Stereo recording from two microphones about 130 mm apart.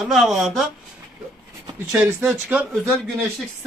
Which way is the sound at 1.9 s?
5° right (ahead or behind).